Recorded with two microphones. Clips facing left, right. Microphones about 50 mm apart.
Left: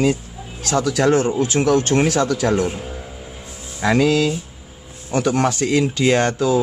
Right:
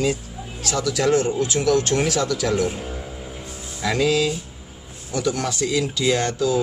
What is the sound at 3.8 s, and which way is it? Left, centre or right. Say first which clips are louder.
A man's voice: left 4 dB; left.